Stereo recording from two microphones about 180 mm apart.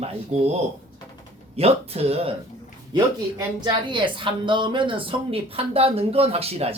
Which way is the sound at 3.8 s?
25° right (ahead or behind).